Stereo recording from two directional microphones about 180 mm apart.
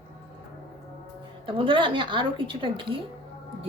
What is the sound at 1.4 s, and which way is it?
A woman's voice, 30° right (ahead or behind).